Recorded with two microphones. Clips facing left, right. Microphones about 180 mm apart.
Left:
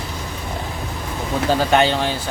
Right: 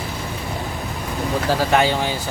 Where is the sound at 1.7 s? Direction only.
5° right (ahead or behind).